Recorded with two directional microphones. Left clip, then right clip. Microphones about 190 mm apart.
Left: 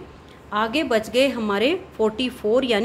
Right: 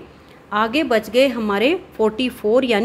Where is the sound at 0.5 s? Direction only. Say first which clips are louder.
Right 3 dB; 20° right (ahead or behind).